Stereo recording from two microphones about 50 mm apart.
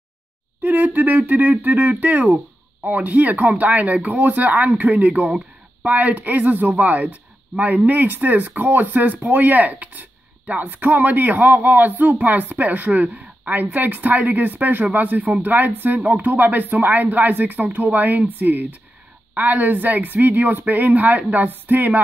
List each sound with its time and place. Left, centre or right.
0.6 s speech: right
13.2 s a sound: right
13.7 s speech: right